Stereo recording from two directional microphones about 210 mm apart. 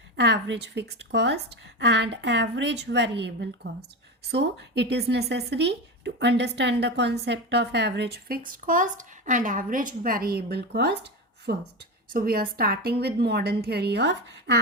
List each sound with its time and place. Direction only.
0.2 s a woman's voice: 55° right (ahead or behind)